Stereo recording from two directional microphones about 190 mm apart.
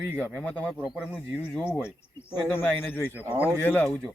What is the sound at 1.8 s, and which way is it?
Speech, 10° left (ahead or behind).